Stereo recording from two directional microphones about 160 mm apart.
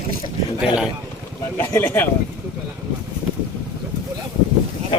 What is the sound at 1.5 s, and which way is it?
Speech, 15° left (ahead or behind).